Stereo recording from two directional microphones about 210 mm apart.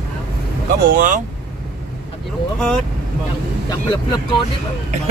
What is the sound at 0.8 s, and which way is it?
Speech, 40° right (ahead or behind).